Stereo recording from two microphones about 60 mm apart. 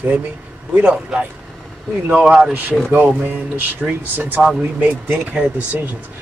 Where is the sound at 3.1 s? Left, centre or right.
Right.